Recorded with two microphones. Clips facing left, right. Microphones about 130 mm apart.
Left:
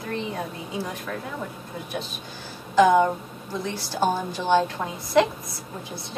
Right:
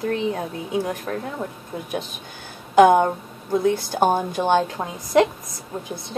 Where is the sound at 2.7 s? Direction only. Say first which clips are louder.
Right 4 dB; 55° right (ahead or behind).